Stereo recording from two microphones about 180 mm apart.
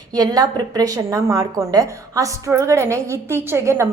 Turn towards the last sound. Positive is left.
turn(degrees=-15)  # may be behind; listen again after turning